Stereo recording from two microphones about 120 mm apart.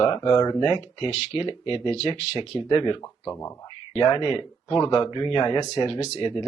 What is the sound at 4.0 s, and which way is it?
Speech, 40° left (ahead or behind).